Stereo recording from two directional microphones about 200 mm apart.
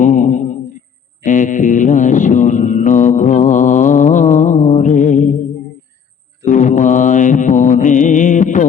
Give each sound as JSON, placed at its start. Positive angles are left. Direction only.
{"t": 0.0, "sound": "a sound", "side_deg": 40}
{"t": 1.2, "sound": "mantra", "side_deg": 40}
{"t": 6.4, "sound": "mantra", "side_deg": 35}